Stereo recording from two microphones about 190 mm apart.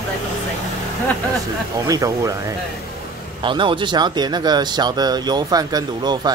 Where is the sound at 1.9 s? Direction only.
20° right (ahead or behind).